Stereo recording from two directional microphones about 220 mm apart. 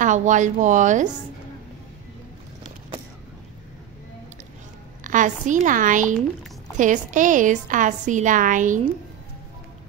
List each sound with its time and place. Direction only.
0.0 s a woman's voice: 35° right (ahead or behind)
5.0 s a woman's voice: 35° right (ahead or behind)